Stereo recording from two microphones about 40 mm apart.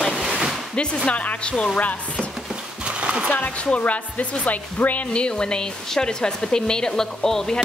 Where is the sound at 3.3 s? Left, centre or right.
Left.